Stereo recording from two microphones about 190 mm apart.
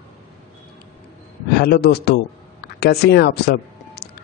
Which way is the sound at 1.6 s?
55° left (ahead or behind).